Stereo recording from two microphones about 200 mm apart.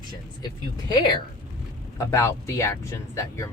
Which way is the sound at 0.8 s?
20° left (ahead or behind).